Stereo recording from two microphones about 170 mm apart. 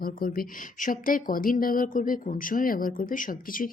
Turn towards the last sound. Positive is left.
turn(degrees=55)  # may be behind; listen again after turning